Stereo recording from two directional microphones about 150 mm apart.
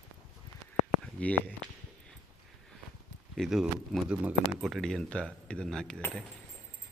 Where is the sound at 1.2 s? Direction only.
10° left (ahead or behind).